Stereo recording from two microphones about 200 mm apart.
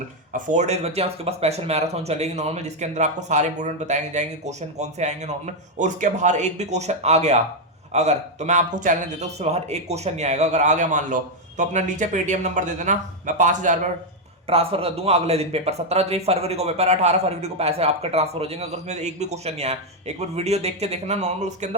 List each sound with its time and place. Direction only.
0.3 s speech: 35° right (ahead or behind)